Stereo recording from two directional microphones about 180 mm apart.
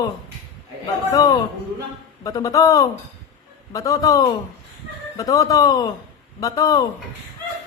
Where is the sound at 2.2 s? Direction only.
20° left (ahead or behind).